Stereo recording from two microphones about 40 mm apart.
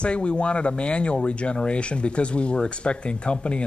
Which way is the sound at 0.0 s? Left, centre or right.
Left.